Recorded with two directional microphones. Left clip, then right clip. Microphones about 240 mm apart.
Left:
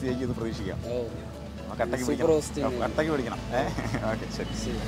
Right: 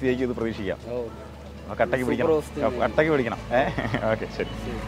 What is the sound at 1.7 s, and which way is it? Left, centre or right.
Speech, right.